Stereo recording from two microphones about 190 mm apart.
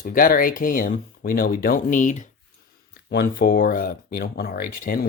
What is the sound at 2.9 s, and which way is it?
Speech, 60° left (ahead or behind).